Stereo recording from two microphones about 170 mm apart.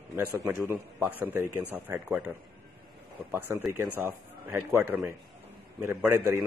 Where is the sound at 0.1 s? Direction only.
10° right (ahead or behind).